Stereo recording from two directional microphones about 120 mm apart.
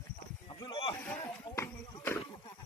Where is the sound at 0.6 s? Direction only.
40° left (ahead or behind); by 2.2 s 25° left (ahead or behind).